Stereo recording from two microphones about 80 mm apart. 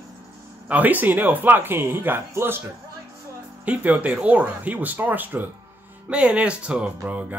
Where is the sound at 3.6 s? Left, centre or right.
Centre.